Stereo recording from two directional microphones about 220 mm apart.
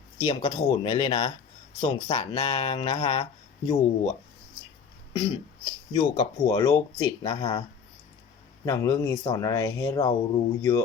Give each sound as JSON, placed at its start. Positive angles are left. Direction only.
{"t": 0.3, "sound": "speech", "side_deg": 25}
{"t": 5.1, "sound": "speech", "side_deg": 20}
{"t": 8.6, "sound": "speech", "side_deg": 15}